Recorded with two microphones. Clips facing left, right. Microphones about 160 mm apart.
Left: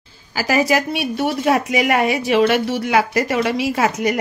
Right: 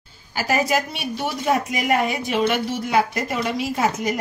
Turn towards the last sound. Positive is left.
turn(degrees=75)  # may be behind; listen again after turning